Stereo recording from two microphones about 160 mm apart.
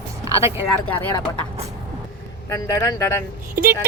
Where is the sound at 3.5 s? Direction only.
65° right (ahead or behind).